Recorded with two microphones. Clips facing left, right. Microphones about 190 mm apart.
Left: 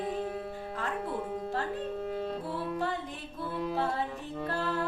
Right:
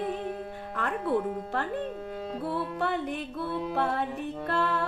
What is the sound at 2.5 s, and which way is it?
Music, 65° right (ahead or behind).